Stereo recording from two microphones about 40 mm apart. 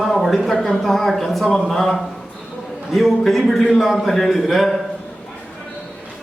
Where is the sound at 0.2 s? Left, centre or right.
Centre.